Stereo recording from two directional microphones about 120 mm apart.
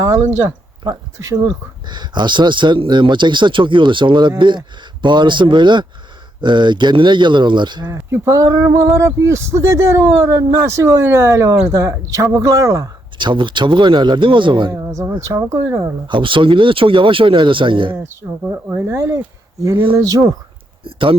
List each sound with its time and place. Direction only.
0.0 s speech: 25° right (ahead or behind)
8.1 s speech: 25° right (ahead or behind)
13.1 s speech: 40° right (ahead or behind)
14.7 s speech: 25° right (ahead or behind)
16.0 s speech: 45° right (ahead or behind)
18.2 s speech: 20° right (ahead or behind)
19.6 s speech: 45° right (ahead or behind)
20.0 s speech: 30° right (ahead or behind)
20.8 s speech: 45° right (ahead or behind)